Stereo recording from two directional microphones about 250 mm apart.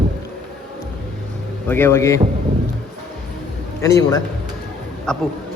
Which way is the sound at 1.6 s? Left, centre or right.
Centre.